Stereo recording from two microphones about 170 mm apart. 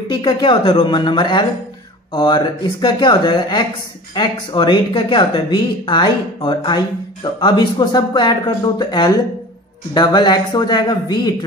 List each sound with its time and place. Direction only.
0.1 s speech: 25° left (ahead or behind)